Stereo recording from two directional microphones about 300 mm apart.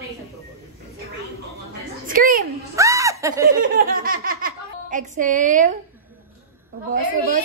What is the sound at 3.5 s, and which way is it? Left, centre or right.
Speech, right.